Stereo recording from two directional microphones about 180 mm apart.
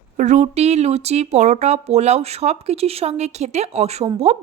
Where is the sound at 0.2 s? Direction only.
40° right (ahead or behind).